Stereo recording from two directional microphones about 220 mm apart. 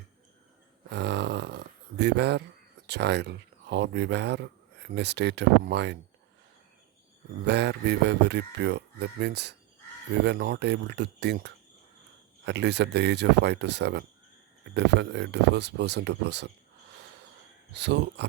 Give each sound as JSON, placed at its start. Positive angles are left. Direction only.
{"t": 0.9, "sound": "a sound", "side_deg": -50}
{"t": 2.8, "sound": "speech", "side_deg": -50}
{"t": 7.4, "sound": "speech", "side_deg": -50}
{"t": 17.7, "sound": "speech", "side_deg": -50}